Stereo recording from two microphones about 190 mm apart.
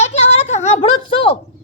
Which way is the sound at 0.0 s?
35° left (ahead or behind).